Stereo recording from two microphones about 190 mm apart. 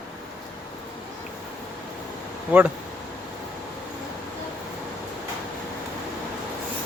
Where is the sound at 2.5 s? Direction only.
10° right (ahead or behind).